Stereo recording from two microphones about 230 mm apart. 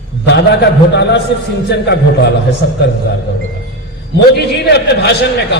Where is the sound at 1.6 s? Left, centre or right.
Left.